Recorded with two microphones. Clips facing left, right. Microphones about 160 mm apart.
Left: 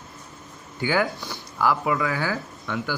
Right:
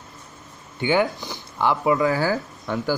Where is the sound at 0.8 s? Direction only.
25° right (ahead or behind).